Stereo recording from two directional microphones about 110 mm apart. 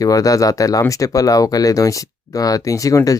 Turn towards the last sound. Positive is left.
turn(degrees=30)  # may be behind; listen again after turning